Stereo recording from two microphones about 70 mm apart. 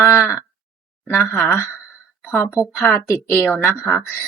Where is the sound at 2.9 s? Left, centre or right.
Left.